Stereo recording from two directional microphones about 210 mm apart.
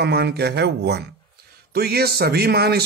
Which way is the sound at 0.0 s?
50° right (ahead or behind).